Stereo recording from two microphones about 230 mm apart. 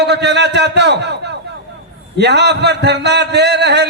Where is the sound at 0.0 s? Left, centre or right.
Right.